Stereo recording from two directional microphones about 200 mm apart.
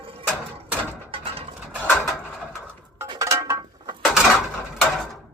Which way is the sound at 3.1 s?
15° right (ahead or behind).